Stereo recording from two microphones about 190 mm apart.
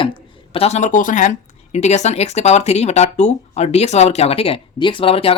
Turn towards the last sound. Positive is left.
turn(degrees=30)  # may be behind; listen again after turning